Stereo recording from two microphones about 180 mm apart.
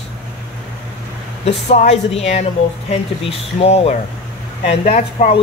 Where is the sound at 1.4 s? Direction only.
35° left (ahead or behind).